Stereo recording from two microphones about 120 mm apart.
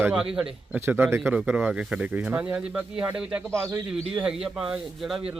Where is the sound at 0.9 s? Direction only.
20° right (ahead or behind).